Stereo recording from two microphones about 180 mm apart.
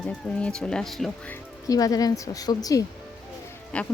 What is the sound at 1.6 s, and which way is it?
Speech, 20° left (ahead or behind).